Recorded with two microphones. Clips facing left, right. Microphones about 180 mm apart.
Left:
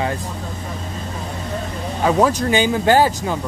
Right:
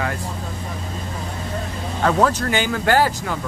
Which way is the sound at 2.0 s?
15° left (ahead or behind).